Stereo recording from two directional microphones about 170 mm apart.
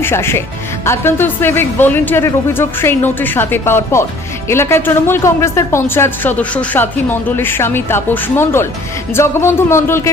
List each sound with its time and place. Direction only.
0.0 s a woman's voice: 15° left (ahead or behind)